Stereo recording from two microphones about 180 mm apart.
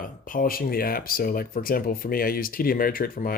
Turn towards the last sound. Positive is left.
turn(degrees=50)  # may be behind; listen again after turning